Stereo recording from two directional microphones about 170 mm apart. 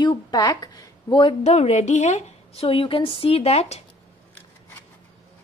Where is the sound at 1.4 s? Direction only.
40° left (ahead or behind).